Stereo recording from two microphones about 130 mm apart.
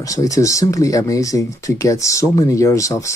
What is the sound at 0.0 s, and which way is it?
Speech, 25° left (ahead or behind).